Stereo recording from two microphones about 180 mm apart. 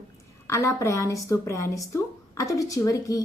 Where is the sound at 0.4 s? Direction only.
15° left (ahead or behind).